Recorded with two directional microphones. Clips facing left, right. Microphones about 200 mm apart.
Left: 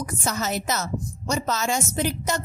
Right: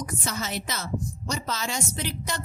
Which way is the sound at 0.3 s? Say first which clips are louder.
Left 7 dB; 45° left (ahead or behind).